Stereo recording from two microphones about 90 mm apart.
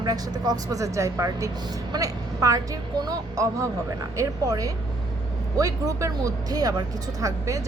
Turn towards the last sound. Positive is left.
turn(degrees=-35)  # may be behind; listen again after turning